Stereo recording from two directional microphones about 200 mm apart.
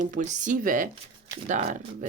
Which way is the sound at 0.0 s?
40° right (ahead or behind).